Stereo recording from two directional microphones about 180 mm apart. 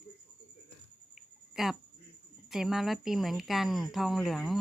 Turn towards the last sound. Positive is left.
turn(degrees=0)  # may be behind; listen again after turning